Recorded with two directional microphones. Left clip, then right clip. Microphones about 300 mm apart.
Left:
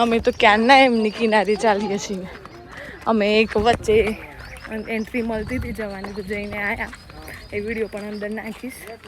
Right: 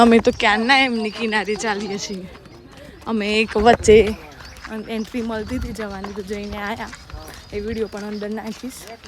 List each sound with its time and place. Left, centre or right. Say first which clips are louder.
0.0 s speech: right 5 dB; centre
0.4 s a woman's voice: left 3 dB; centre
3.6 s speech: right 10 dB; right
4.7 s speech: left 2 dB; centre